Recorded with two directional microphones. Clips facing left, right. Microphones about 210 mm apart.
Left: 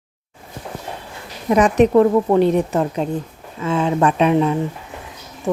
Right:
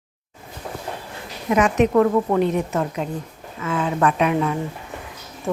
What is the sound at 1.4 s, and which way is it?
A woman's voice, 35° left (ahead or behind).